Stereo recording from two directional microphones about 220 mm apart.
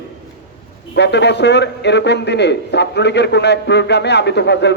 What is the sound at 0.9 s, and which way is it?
A man's voice, 50° left (ahead or behind).